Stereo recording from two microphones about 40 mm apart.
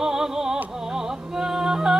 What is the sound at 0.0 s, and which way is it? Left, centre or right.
Music, centre.